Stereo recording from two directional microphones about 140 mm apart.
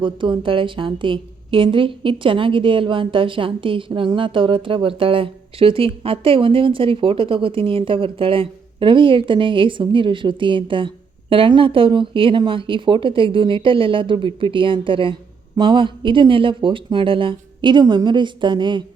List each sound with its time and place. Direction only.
0.0 s a woman's voice: 35° right (ahead or behind)